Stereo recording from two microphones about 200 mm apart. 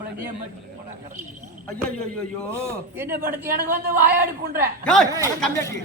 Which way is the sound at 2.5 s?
10° right (ahead or behind).